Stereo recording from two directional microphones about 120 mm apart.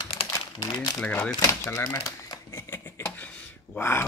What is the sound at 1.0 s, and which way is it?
Speech, 15° left (ahead or behind).